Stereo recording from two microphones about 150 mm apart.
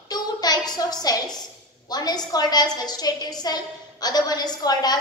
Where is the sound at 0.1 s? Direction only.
25° left (ahead or behind).